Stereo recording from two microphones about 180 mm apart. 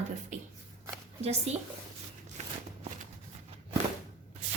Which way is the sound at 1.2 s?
35° right (ahead or behind).